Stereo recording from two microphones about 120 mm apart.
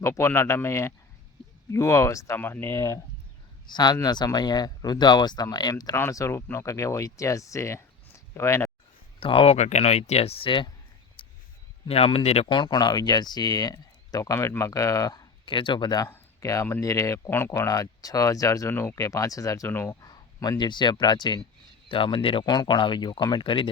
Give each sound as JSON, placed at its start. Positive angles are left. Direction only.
{"t": 0.0, "sound": "speech", "side_deg": 20}
{"t": 3.7, "sound": "speech", "side_deg": 35}
{"t": 9.2, "sound": "speech", "side_deg": 50}
{"t": 9.6, "sound": "speech", "side_deg": 70}
{"t": 11.2, "sound": "a sound", "side_deg": 45}
{"t": 11.9, "sound": "speech", "side_deg": 55}
{"t": 16.0, "sound": "speech", "side_deg": 20}
{"t": 20.1, "sound": "speech", "side_deg": 35}